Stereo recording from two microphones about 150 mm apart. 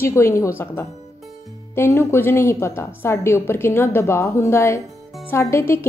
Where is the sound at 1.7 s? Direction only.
15° left (ahead or behind).